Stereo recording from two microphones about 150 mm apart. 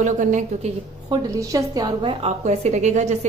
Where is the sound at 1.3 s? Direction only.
25° right (ahead or behind).